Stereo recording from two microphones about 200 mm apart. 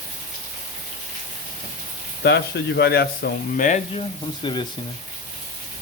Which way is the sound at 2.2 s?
55° left (ahead or behind).